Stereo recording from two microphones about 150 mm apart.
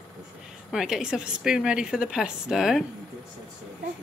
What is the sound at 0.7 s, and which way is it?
A woman's voice, 5° right (ahead or behind).